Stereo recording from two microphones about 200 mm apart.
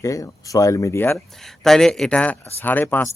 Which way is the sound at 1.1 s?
Centre (ahead or behind).